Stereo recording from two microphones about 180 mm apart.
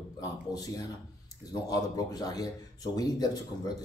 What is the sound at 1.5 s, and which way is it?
Speech, 20° left (ahead or behind).